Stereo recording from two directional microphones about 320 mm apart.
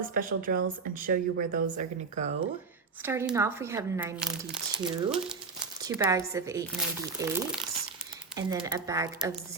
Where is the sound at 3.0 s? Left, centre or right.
Centre.